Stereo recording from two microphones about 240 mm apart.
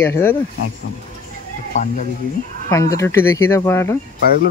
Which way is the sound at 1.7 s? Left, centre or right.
Left.